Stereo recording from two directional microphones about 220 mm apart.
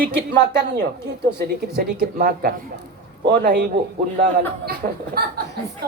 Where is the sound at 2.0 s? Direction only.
45° right (ahead or behind).